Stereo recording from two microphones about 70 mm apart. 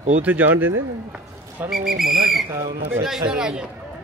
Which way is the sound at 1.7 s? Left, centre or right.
Centre.